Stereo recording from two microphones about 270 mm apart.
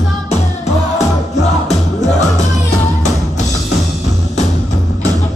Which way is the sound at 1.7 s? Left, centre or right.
Left.